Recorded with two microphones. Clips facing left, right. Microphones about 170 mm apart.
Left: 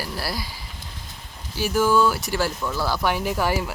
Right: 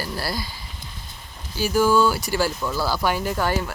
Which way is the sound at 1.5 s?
Centre (ahead or behind).